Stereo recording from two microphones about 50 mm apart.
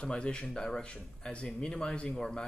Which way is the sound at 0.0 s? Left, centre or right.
Centre.